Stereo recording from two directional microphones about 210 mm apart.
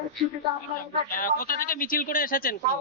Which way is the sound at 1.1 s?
40° left (ahead or behind).